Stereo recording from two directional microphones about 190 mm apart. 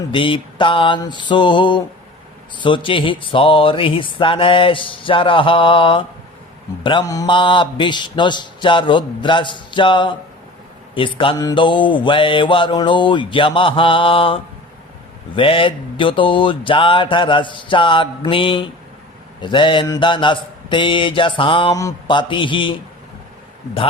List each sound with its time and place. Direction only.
0.0 s mantra: 25° left (ahead or behind)
11.2 s mantra: 25° left (ahead or behind)